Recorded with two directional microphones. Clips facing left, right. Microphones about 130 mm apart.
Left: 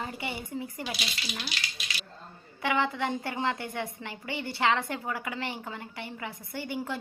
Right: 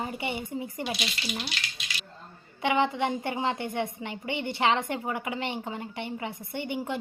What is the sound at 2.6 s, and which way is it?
A woman's voice, 20° right (ahead or behind).